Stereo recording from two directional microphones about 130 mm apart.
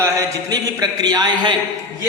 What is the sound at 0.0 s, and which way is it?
Speech, 25° right (ahead or behind).